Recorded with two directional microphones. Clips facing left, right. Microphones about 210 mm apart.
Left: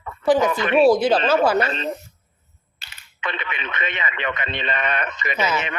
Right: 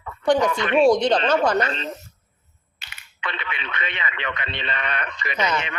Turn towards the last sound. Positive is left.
turn(degrees=5)  # may be behind; listen again after turning